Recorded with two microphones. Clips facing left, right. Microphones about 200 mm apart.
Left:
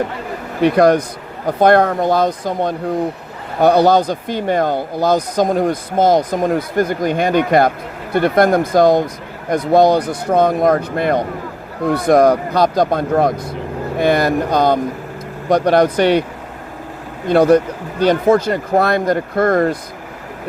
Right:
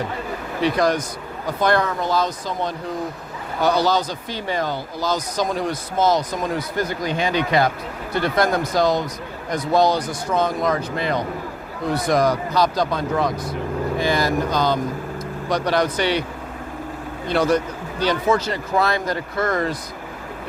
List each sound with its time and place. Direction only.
0.6 s speech: 60° left (ahead or behind)
17.2 s speech: 55° left (ahead or behind)